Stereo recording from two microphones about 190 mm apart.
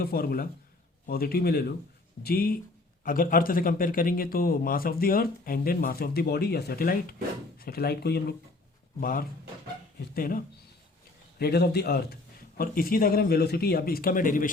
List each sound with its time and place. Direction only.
0.0 s speech: 50° left (ahead or behind)